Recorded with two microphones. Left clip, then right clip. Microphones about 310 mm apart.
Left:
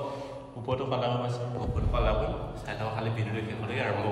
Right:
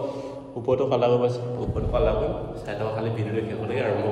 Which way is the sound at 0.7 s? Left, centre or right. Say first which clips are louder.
Right 9 dB; centre.